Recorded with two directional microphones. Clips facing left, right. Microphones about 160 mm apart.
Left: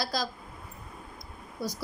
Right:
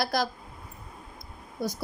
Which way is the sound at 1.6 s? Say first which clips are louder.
Right 3 dB; 60° right (ahead or behind).